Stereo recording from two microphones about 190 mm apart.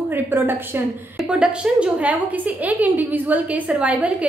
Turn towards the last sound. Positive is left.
turn(degrees=-5)  # may be behind; listen again after turning